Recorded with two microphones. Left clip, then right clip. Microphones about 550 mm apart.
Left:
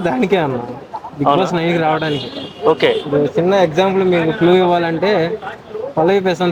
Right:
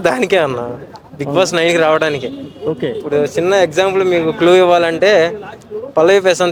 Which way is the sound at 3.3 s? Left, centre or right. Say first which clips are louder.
Right 1 dB; right.